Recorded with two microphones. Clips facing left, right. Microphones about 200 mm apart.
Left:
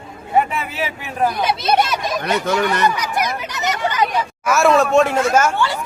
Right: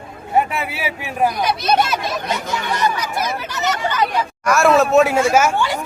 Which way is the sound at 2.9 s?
15° left (ahead or behind).